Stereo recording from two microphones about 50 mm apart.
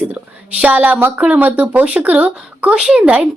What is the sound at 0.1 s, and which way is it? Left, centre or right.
A woman's voice, right.